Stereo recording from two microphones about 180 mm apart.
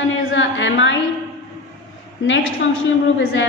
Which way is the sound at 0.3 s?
90° left.